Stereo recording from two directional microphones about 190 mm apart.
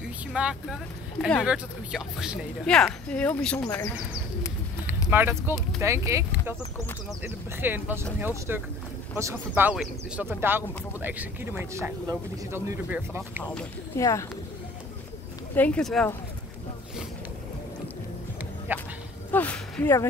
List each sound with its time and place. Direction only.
0.3 s speech: 5° right (ahead or behind); by 3.9 s 15° left (ahead or behind)
5.1 s speech: 10° right (ahead or behind)
13.4 s speech: 10° left (ahead or behind)
15.5 s speech: 5° left (ahead or behind)
18.7 s speech: 10° right (ahead or behind)
19.3 s speech: 10° left (ahead or behind)